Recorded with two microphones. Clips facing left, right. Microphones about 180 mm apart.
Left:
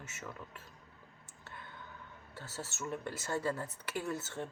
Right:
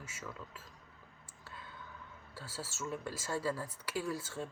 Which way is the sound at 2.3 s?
20° left (ahead or behind).